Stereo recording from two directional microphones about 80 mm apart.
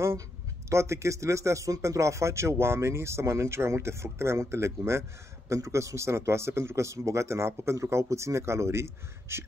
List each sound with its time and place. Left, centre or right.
0.7 s speech: right